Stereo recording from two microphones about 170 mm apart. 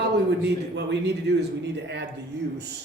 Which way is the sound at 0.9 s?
85° right.